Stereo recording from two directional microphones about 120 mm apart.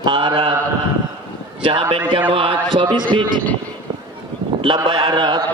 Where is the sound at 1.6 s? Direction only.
50° right (ahead or behind).